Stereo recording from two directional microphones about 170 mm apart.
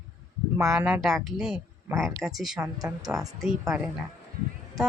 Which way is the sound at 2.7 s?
20° right (ahead or behind).